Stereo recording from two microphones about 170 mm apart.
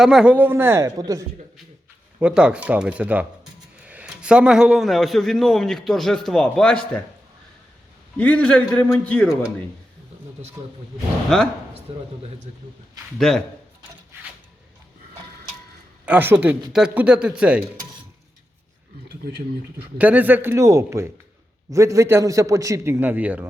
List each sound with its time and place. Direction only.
0.0 s a man's voice: 5° right (ahead or behind); by 1.2 s 20° right (ahead or behind)
2.1 s a man's voice: 5° right (ahead or behind)
8.2 s a man's voice: 10° left (ahead or behind)
10.6 s a man's voice: 15° right (ahead or behind)
11.9 s speech: 35° right (ahead or behind)
13.1 s a man's voice: centre (ahead or behind)
16.0 s a man's voice: 10° right (ahead or behind)
20.0 s a man's voice: 10° right (ahead or behind)